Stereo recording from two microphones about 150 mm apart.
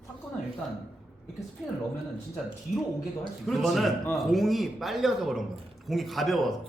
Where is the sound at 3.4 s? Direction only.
Centre (ahead or behind).